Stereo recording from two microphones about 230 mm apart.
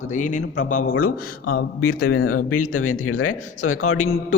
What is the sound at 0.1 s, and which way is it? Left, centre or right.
A man's voice, left.